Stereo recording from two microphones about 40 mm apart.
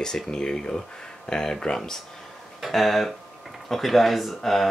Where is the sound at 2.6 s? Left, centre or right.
Centre.